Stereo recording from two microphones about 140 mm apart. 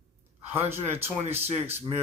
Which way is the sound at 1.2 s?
50° right (ahead or behind).